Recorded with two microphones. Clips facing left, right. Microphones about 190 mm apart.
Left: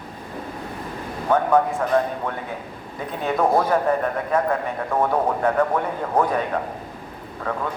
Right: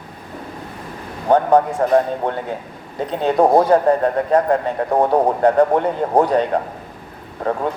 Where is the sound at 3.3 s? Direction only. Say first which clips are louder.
Right 6 dB; 35° right (ahead or behind).